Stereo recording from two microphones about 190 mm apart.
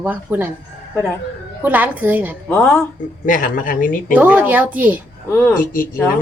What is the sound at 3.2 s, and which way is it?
Speech, 45° left (ahead or behind).